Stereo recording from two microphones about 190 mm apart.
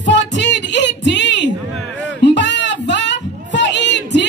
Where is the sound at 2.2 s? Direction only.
70° left (ahead or behind).